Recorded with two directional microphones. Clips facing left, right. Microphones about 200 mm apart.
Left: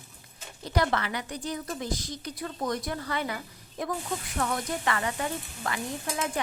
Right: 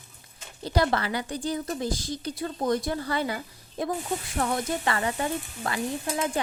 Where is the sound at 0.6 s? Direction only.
30° right (ahead or behind).